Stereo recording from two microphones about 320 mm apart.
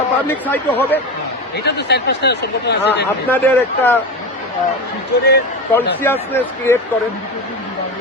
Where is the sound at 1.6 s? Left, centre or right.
Left.